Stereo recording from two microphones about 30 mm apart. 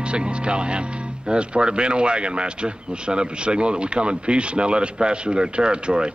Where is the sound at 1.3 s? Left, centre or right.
Right.